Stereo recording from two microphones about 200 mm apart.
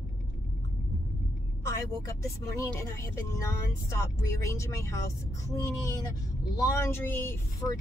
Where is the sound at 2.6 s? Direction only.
15° left (ahead or behind).